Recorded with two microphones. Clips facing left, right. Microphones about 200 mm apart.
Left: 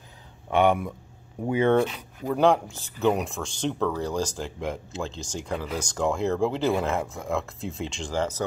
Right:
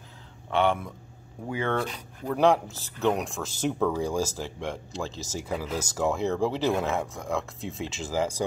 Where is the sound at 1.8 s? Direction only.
5° left (ahead or behind).